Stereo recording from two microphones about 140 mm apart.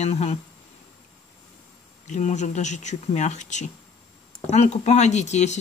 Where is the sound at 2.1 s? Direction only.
60° left (ahead or behind).